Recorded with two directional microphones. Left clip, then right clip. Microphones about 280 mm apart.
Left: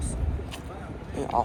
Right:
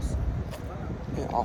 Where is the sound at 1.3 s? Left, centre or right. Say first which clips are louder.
Left 3 dB; left.